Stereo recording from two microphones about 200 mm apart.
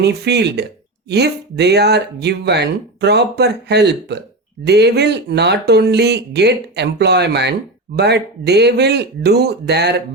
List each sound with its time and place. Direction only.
0.0 s speech: 55° right (ahead or behind)